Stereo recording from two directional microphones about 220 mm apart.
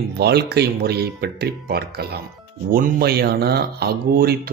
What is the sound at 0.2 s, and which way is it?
Speech, 50° right (ahead or behind).